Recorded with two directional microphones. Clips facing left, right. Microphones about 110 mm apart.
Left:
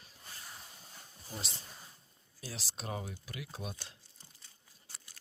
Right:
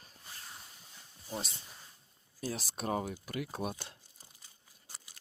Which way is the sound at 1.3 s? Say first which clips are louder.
Right 5 dB; 45° right (ahead or behind).